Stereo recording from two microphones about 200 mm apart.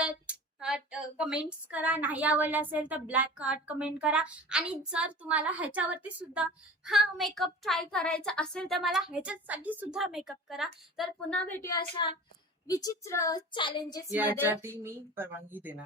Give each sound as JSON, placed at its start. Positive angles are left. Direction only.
{"t": 0.0, "sound": "speech", "side_deg": -5}
{"t": 14.1, "sound": "speech", "side_deg": -10}